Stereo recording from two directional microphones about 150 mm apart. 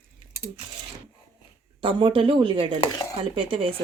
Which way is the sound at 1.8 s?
35° right (ahead or behind).